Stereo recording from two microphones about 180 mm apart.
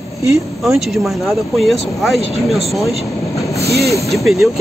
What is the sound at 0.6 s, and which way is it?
Speech, centre (ahead or behind).